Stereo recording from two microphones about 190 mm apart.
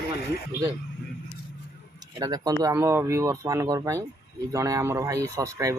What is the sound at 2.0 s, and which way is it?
Speech, 20° right (ahead or behind).